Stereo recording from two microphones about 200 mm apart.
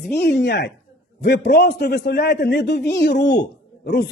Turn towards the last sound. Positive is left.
turn(degrees=55)  # may be behind; listen again after turning